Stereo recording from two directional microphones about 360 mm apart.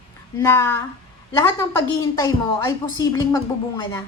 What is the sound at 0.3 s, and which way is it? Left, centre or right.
A woman's voice, centre.